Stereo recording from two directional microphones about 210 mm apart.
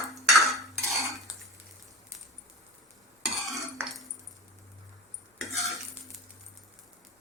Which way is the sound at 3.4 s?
Centre (ahead or behind).